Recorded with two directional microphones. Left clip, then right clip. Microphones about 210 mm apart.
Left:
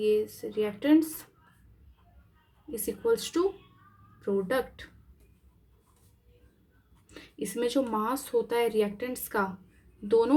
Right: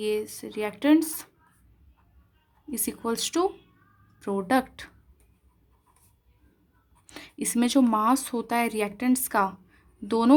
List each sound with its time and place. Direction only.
0.0 s speech: 55° right (ahead or behind)
2.8 s a woman's voice: 55° right (ahead or behind)
7.1 s speech: 55° right (ahead or behind)